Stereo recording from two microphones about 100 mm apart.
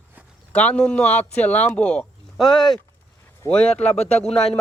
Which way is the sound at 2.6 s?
Centre (ahead or behind).